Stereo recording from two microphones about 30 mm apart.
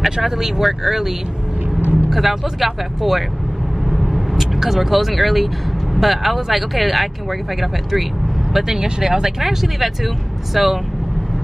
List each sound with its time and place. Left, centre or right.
0.0 s speech: centre
3.9 s vehicle: centre
5.9 s speech: centre
8.6 s speech: centre
9.4 s speech: centre